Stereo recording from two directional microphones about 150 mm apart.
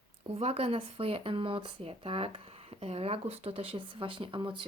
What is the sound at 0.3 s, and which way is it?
Speech, 40° right (ahead or behind).